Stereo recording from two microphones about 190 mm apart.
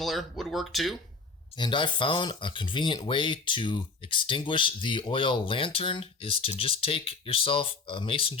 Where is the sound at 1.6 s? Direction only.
25° left (ahead or behind).